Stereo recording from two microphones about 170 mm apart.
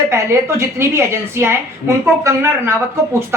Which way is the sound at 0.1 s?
15° right (ahead or behind).